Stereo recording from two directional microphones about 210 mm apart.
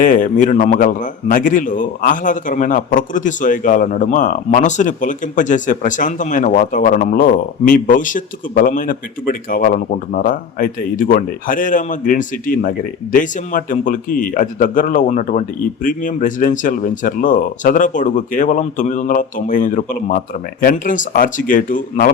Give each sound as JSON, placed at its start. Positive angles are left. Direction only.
{"t": 0.0, "sound": "a man's voice", "side_deg": 40}